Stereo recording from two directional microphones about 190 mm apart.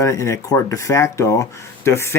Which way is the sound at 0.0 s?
15° left (ahead or behind).